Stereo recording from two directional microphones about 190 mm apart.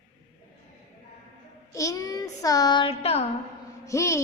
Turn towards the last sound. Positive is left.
turn(degrees=15)  # may be behind; listen again after turning